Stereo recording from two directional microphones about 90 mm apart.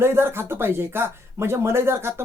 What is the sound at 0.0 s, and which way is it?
Speech, 25° right (ahead or behind).